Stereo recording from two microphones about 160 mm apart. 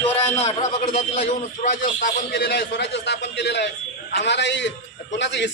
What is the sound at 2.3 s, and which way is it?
A man's voice, 90° left.